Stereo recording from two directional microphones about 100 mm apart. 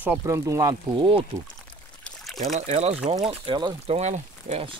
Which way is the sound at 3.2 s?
55° right (ahead or behind).